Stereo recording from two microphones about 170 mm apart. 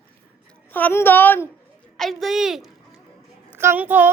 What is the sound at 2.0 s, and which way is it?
Speech, centre (ahead or behind).